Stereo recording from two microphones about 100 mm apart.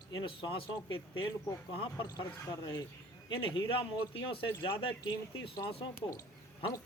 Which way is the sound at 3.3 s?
55° left (ahead or behind).